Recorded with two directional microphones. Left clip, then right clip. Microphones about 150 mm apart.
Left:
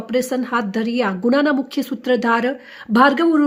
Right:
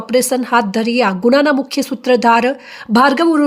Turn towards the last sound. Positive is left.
turn(degrees=-15)  # may be behind; listen again after turning